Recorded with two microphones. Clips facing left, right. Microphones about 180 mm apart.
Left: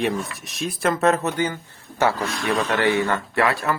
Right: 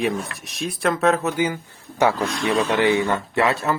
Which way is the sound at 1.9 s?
15° right (ahead or behind).